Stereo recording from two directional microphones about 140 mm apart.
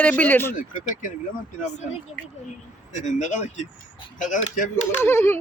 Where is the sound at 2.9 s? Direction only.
60° left (ahead or behind).